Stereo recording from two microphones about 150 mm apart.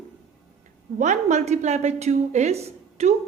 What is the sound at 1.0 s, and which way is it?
Speech, 50° right (ahead or behind).